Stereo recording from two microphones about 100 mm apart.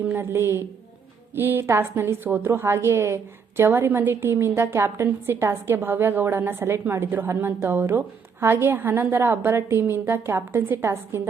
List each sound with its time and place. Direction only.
0.0 s a woman's voice: 20° right (ahead or behind)